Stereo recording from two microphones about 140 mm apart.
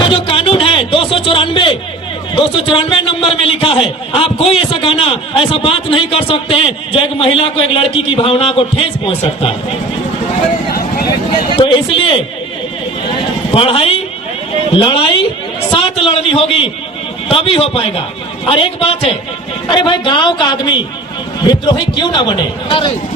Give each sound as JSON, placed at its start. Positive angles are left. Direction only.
{"t": 0.0, "sound": "a sound", "side_deg": 40}
{"t": 2.3, "sound": "a man's voice", "side_deg": 40}
{"t": 11.3, "sound": "a man's voice", "side_deg": 35}
{"t": 13.5, "sound": "a man's voice", "side_deg": 40}
{"t": 15.7, "sound": "a sound", "side_deg": 40}
{"t": 17.2, "sound": "a man's voice", "side_deg": 40}